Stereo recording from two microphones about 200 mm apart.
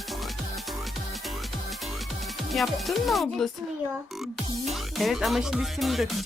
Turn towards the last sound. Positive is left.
turn(degrees=0)  # may be behind; listen again after turning